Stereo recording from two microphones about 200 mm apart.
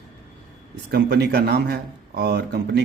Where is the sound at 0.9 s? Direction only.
55° right (ahead or behind).